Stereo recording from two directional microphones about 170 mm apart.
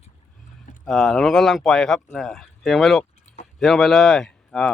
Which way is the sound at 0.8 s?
Centre (ahead or behind).